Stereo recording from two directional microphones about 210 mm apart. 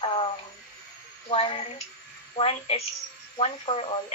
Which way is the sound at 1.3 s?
25° left (ahead or behind).